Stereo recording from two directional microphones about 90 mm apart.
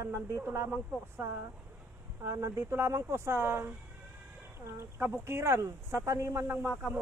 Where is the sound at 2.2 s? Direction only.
30° right (ahead or behind).